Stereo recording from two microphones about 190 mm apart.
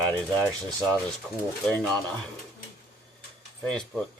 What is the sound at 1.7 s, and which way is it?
Speech, 5° left (ahead or behind).